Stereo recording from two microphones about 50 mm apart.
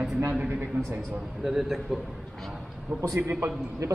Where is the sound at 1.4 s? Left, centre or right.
Centre.